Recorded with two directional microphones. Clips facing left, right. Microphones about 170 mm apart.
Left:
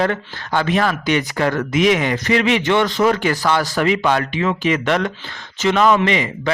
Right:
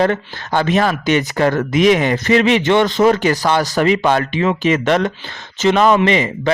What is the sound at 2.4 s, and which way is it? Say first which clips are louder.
Speech: right 3 dB; 25° right (ahead or behind).